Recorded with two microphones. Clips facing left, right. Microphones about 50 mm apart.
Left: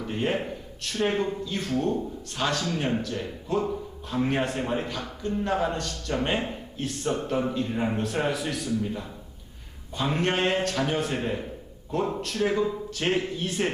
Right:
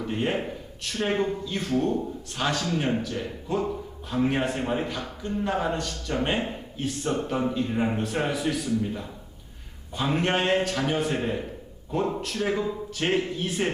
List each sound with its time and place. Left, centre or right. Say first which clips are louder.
0.0 s a man's voice: even; centre